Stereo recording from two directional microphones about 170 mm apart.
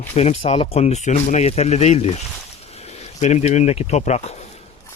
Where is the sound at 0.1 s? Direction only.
40° left (ahead or behind).